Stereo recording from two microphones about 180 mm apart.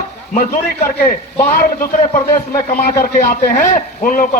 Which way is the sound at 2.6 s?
55° left (ahead or behind).